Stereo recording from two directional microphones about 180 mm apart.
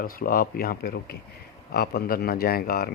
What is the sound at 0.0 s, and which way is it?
Speech, 55° left (ahead or behind).